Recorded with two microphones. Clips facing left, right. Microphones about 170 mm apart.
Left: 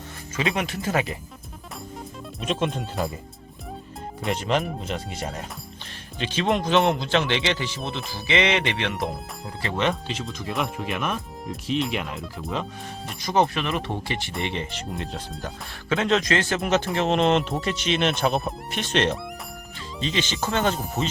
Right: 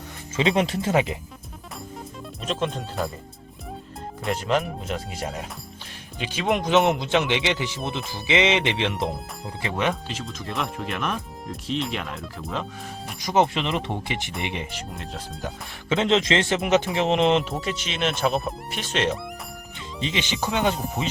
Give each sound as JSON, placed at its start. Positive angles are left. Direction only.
{"t": 0.3, "sound": "speech", "side_deg": -25}
{"t": 2.4, "sound": "speech", "side_deg": 0}
{"t": 4.2, "sound": "speech", "side_deg": 0}
{"t": 13.2, "sound": "speech", "side_deg": -20}
{"t": 15.9, "sound": "speech", "side_deg": -20}
{"t": 17.5, "sound": "speech", "side_deg": -5}
{"t": 20.0, "sound": "speech", "side_deg": -15}
{"t": 20.7, "sound": "speech", "side_deg": 0}